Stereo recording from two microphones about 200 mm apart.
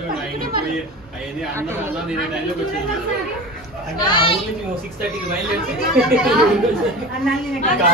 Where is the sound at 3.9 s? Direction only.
20° left (ahead or behind).